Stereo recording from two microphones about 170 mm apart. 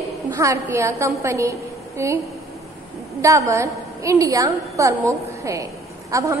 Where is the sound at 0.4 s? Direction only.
15° right (ahead or behind).